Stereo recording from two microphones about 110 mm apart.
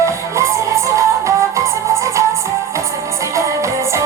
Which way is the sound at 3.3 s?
25° right (ahead or behind).